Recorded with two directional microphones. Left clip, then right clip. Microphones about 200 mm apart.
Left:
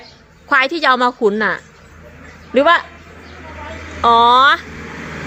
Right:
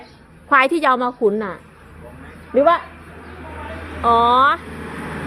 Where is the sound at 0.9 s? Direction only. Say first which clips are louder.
Left 3 dB; 10° left (ahead or behind).